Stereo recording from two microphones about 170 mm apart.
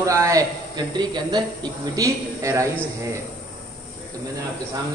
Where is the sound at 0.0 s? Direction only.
20° right (ahead or behind).